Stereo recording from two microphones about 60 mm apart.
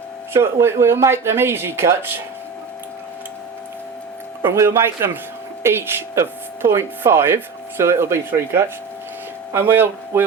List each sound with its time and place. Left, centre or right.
0.3 s speech: right
4.5 s speech: right
9.5 s a man's voice: right